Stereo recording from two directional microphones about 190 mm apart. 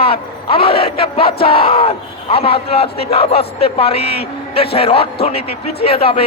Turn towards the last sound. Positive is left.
turn(degrees=30)  # may be behind; listen again after turning